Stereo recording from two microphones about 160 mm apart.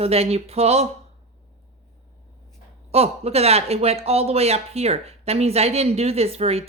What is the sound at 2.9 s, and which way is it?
Speech, 40° right (ahead or behind).